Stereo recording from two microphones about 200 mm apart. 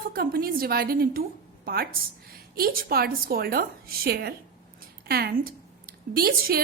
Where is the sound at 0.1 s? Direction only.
50° right (ahead or behind).